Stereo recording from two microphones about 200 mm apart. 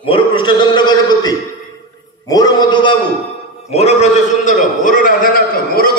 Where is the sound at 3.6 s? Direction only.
35° left (ahead or behind).